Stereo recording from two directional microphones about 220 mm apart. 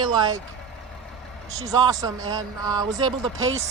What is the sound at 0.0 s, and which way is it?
Speech, 20° right (ahead or behind).